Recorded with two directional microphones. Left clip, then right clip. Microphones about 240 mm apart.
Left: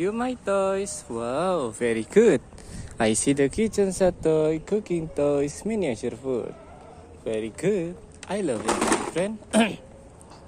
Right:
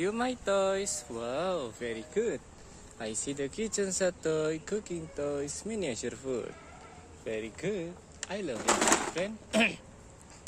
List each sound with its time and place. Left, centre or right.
0.0 s speech: centre
7.2 s speech: centre
8.6 s speech: centre
9.1 s speech: left